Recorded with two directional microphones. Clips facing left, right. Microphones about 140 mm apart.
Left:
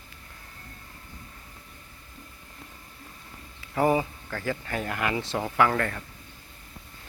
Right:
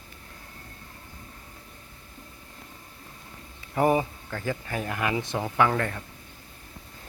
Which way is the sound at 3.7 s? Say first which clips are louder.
Right 1 dB; 20° right (ahead or behind).